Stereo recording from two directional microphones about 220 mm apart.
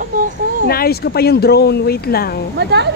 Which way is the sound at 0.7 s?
45° left (ahead or behind).